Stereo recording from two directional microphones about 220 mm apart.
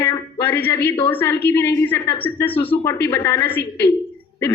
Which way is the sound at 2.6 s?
25° left (ahead or behind).